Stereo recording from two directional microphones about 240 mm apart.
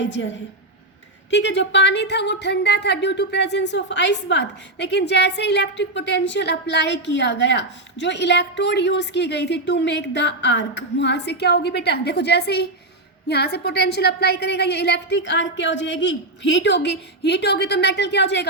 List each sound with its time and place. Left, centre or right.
0.0 s speech: left
1.3 s speech: left